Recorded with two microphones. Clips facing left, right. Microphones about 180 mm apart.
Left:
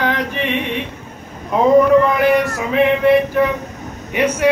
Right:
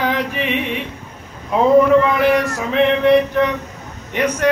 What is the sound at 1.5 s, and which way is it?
Music, centre (ahead or behind).